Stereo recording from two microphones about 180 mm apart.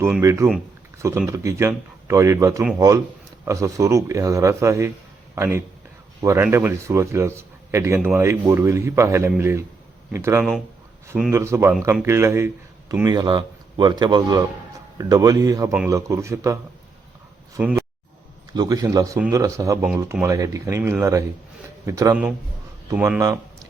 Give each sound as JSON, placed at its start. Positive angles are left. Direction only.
{"t": 0.2, "sound": "a man's voice", "side_deg": -15}
{"t": 17.6, "sound": "speech", "side_deg": -10}
{"t": 18.5, "sound": "a man's voice", "side_deg": -20}